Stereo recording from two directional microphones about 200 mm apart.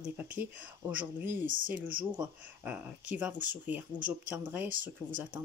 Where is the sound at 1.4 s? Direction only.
40° right (ahead or behind).